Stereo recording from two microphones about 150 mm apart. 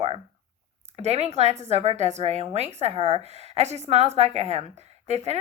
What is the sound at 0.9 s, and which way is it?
A woman's voice, 45° right (ahead or behind).